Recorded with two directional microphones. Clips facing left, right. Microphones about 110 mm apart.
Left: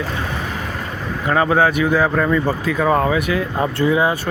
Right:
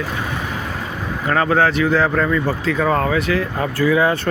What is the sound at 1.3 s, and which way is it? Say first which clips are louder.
Speech: left 1 dB; 15° left (ahead or behind).